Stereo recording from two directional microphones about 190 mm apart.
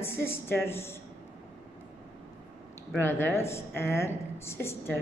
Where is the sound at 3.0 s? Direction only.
10° left (ahead or behind).